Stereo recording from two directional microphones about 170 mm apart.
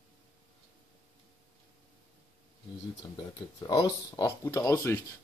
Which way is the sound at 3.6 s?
20° left (ahead or behind).